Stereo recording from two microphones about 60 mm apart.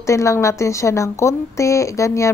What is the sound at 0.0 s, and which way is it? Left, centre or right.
A woman's voice, left.